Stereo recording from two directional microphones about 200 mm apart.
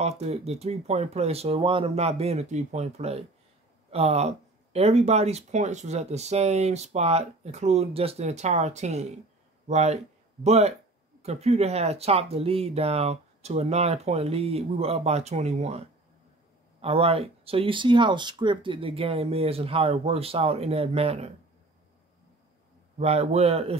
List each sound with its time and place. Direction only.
0.0 s speech: 30° right (ahead or behind)
16.8 s speech: 30° right (ahead or behind)
22.9 s speech: 30° right (ahead or behind)